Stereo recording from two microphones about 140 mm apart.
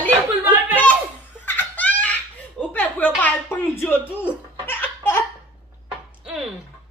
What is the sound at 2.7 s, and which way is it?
A woman's voice, 10° left (ahead or behind).